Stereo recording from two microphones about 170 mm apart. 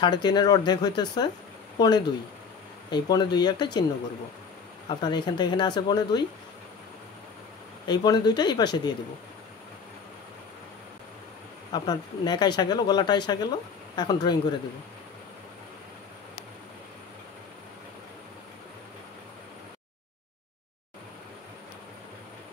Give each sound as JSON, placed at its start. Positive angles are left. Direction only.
{"t": 0.0, "sound": "speech", "side_deg": 25}
{"t": 4.8, "sound": "speech", "side_deg": 25}
{"t": 7.8, "sound": "speech", "side_deg": 25}
{"t": 11.7, "sound": "speech", "side_deg": 25}